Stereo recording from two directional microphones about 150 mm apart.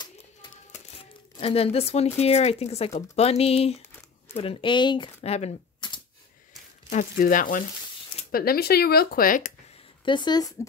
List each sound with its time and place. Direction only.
0.7 s typewriter: 50° left (ahead or behind)
1.4 s speech: 40° left (ahead or behind)
5.8 s typewriter: 30° left (ahead or behind)
6.9 s speech: 60° left (ahead or behind)
8.3 s speech: 85° left; by 9.5 s 70° left (ahead or behind)
10.0 s speech: 30° left (ahead or behind)